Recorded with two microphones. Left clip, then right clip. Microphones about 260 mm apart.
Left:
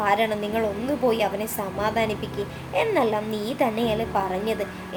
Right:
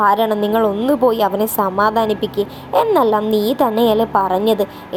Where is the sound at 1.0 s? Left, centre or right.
Right.